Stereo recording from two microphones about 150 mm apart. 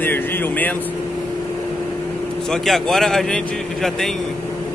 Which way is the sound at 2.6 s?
Centre (ahead or behind).